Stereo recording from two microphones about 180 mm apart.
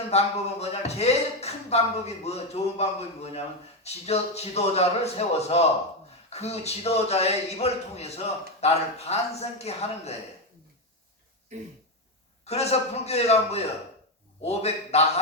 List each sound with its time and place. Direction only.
0.1 s a man's voice: 35° left (ahead or behind)
12.5 s a man's voice: 35° left (ahead or behind)